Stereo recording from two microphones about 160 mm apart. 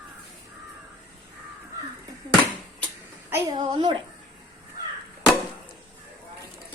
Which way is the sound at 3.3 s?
25° right (ahead or behind).